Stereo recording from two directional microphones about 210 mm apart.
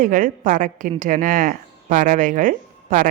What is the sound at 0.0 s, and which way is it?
A woman's voice, 40° right (ahead or behind).